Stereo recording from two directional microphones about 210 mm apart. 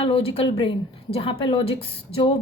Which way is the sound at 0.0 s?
25° left (ahead or behind).